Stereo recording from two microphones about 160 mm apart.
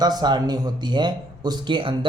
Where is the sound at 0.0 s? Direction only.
25° right (ahead or behind).